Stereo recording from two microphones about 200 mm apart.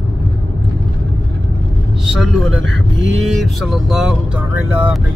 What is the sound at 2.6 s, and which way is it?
Speech, 70° right (ahead or behind).